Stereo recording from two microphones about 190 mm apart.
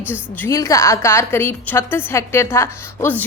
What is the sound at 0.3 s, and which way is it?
A woman's voice, 15° left (ahead or behind).